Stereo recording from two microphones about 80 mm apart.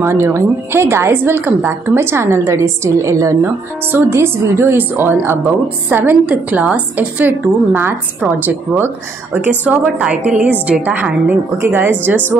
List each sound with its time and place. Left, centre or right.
0.0 s a woman's voice: right
9.7 s a woman's voice: centre